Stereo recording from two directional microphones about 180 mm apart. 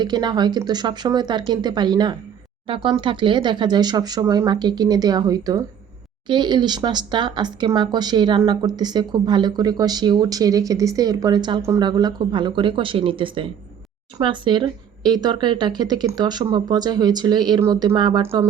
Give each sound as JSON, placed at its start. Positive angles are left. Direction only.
{"t": 0.0, "sound": "speech", "side_deg": -25}